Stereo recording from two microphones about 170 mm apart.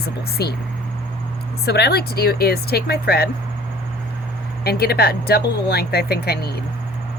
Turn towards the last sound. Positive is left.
turn(degrees=70)  # may be behind; listen again after turning